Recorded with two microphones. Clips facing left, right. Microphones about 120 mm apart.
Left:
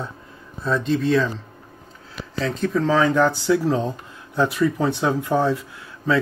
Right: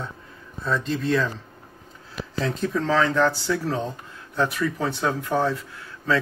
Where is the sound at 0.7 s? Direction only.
Centre (ahead or behind).